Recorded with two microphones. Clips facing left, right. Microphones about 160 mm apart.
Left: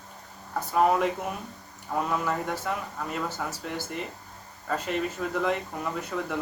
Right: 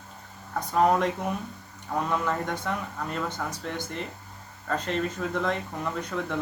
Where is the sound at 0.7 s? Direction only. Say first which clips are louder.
Even; 5° left (ahead or behind).